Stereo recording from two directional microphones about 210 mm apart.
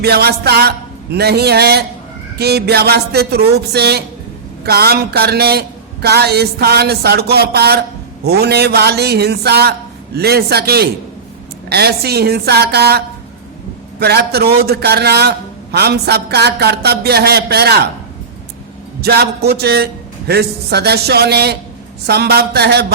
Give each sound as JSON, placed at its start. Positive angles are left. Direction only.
{"t": 0.0, "sound": "speech", "side_deg": -50}
{"t": 14.0, "sound": "speech", "side_deg": -50}
{"t": 19.0, "sound": "speech", "side_deg": -50}